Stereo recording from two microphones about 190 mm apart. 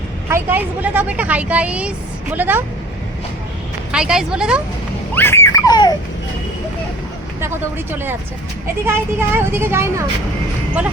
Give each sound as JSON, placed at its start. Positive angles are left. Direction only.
{"t": 0.3, "sound": "speech", "side_deg": -10}
{"t": 3.9, "sound": "a woman's voice", "side_deg": -5}
{"t": 5.1, "sound": "babbling", "side_deg": 15}
{"t": 8.9, "sound": "speech", "side_deg": -10}